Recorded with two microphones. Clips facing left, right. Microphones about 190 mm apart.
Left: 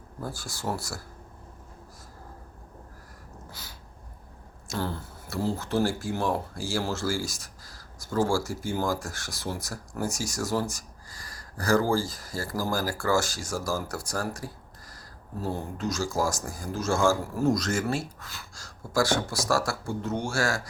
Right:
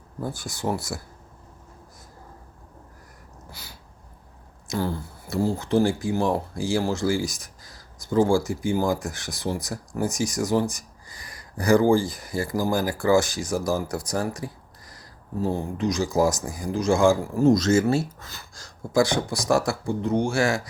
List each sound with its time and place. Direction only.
0.2 s speech: 20° right (ahead or behind)
3.5 s a sound: 10° right (ahead or behind)
4.7 s speech: 15° right (ahead or behind)